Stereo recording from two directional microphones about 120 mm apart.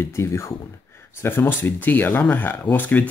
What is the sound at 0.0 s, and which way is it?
Speech, 20° left (ahead or behind).